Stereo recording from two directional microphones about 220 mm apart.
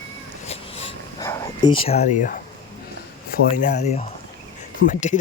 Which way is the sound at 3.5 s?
35° left (ahead or behind).